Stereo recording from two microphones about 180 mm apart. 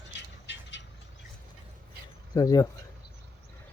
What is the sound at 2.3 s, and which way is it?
Speech, 20° left (ahead or behind).